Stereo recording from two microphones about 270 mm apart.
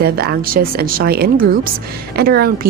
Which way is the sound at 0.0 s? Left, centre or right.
Right.